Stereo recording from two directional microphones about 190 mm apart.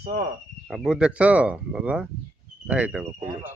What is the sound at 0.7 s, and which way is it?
Speech, 5° right (ahead or behind).